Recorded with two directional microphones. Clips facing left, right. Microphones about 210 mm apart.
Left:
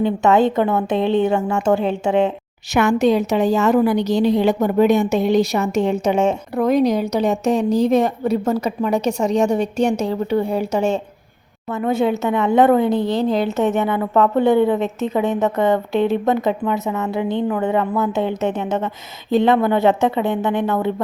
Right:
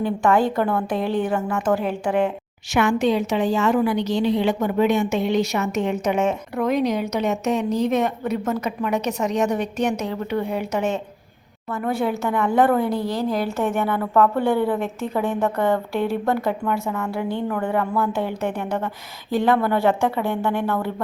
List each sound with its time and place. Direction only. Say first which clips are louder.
0.0 s speech: left 4 dB; 20° left (ahead or behind)
2.7 s a woman's voice: left 4 dB; 40° left (ahead or behind); by 20.9 s 20° left (ahead or behind)